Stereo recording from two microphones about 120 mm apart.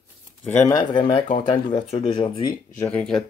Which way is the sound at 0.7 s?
40° left (ahead or behind).